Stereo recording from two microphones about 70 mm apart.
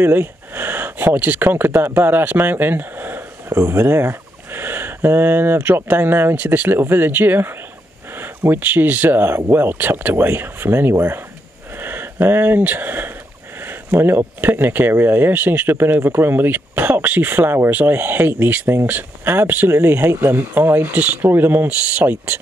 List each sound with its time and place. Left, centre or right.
0.0 s speech: right